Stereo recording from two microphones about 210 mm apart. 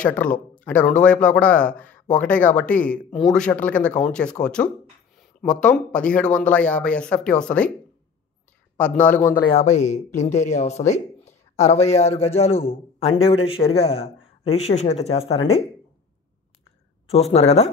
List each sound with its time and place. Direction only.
0.0 s speech: 5° left (ahead or behind)
8.7 s speech: 5° left (ahead or behind)
9.5 s a man's voice: 35° left (ahead or behind)
17.1 s a man's voice: 30° left (ahead or behind)